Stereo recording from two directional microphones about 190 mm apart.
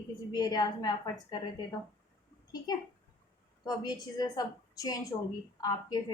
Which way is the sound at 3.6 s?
20° left (ahead or behind).